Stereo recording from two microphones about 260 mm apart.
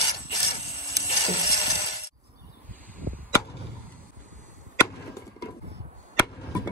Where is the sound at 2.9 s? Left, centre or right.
Right.